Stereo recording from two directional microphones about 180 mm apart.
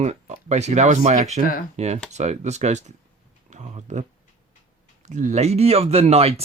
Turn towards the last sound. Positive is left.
turn(degrees=-35)  # may be behind; listen again after turning